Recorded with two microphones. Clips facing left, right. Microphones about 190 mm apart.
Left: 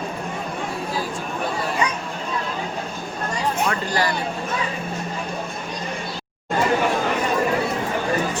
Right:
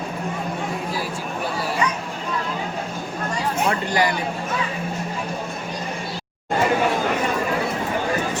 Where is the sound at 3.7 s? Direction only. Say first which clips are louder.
Right 2 dB; 15° right (ahead or behind).